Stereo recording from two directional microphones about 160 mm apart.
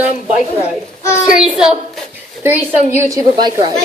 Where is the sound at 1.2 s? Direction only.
5° right (ahead or behind); by 3.7 s 25° right (ahead or behind).